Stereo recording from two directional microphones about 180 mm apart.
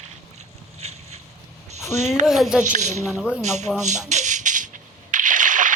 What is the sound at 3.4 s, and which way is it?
Speech, 40° right (ahead or behind).